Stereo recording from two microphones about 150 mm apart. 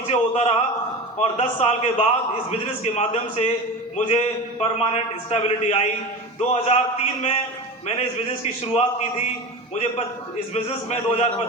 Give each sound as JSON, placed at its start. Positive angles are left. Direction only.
{"t": 0.1, "sound": "a man's voice", "side_deg": 45}
{"t": 10.5, "sound": "a man's voice", "side_deg": 50}